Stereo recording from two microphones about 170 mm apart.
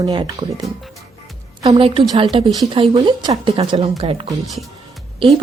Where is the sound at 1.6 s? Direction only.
35° right (ahead or behind).